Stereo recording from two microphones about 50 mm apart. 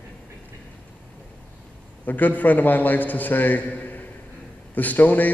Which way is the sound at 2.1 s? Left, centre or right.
Left.